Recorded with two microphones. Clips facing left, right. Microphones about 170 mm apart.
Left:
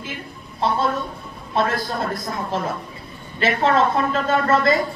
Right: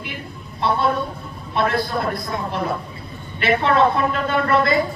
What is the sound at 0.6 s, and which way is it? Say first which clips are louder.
A woman's voice: right 1 dB; 40° left (ahead or behind).